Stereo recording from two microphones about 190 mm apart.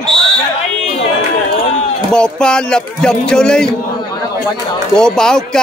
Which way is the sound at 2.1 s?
5° left (ahead or behind).